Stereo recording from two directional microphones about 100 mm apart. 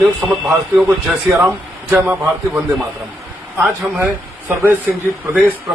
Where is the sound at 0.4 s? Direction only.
20° right (ahead or behind).